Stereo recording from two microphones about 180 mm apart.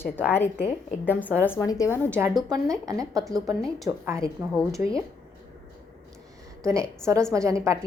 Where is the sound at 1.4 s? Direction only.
15° left (ahead or behind).